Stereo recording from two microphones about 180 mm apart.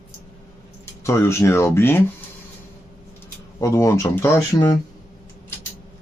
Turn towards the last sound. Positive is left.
turn(degrees=15)  # may be behind; listen again after turning